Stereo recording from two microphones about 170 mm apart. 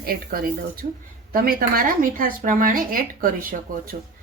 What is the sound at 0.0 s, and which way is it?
A woman's voice, 60° right (ahead or behind).